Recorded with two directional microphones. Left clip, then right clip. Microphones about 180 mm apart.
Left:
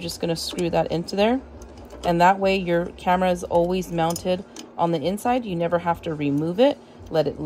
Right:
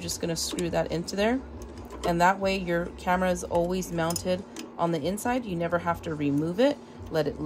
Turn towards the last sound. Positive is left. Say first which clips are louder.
# left 5 dB
turn(degrees=30)  # may be behind; listen again after turning